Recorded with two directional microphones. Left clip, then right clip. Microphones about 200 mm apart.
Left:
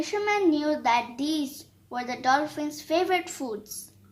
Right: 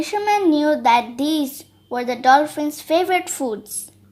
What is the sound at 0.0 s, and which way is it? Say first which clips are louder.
A woman's voice: right 6 dB; 30° right (ahead or behind).